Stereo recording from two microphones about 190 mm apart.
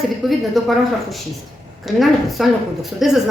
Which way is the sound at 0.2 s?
Centre (ahead or behind).